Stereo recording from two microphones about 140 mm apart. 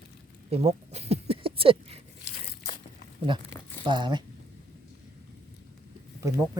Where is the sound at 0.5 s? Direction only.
45° right (ahead or behind).